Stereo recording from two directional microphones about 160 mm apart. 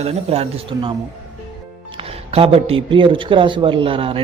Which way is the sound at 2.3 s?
35° right (ahead or behind).